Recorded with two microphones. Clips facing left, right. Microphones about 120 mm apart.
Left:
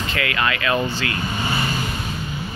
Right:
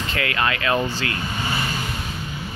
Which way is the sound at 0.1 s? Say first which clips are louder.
Even; 35° right (ahead or behind).